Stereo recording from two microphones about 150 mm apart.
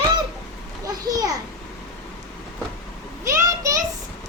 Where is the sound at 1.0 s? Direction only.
25° right (ahead or behind).